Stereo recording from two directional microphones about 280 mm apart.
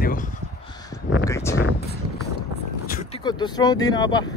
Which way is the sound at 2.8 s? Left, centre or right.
Left.